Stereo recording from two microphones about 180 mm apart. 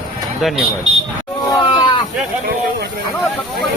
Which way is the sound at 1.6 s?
25° left (ahead or behind).